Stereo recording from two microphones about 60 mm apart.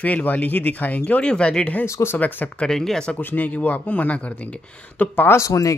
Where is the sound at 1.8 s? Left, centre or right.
Left.